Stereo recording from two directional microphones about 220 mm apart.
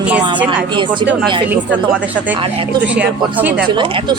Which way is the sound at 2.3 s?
25° right (ahead or behind).